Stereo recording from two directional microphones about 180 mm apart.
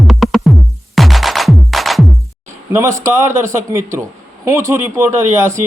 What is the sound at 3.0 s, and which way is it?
A man's voice, 15° right (ahead or behind).